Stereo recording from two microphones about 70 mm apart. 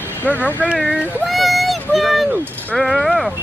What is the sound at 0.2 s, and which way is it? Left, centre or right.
Speech, left.